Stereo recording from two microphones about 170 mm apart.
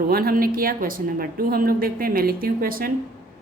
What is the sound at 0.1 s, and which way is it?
A woman's voice, 60° right (ahead or behind).